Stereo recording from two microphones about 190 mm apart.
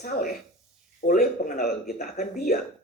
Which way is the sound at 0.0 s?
50° left (ahead or behind).